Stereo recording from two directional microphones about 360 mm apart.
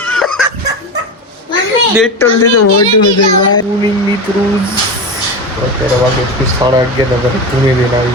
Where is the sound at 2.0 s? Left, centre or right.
Centre.